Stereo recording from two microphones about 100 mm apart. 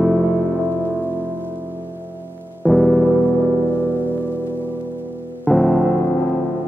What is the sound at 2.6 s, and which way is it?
Piano, 15° right (ahead or behind).